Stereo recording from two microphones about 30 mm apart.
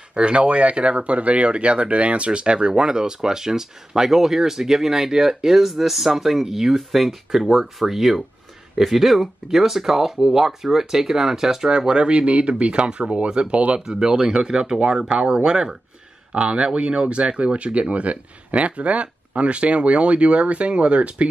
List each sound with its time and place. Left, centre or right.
0.1 s speech: right; by 11.7 s centre
11.7 s speech: right
16.3 s speech: right
17.3 s speech: right